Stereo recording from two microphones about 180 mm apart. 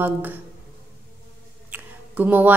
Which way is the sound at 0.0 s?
10° right (ahead or behind).